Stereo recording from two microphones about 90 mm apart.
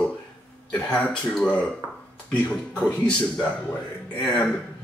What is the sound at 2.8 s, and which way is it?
Speech, 15° left (ahead or behind).